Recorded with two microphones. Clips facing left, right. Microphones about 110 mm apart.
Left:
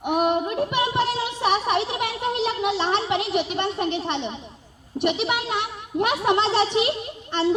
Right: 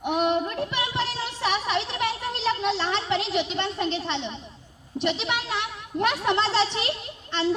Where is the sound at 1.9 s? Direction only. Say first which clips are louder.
Left 3 dB; 15° left (ahead or behind).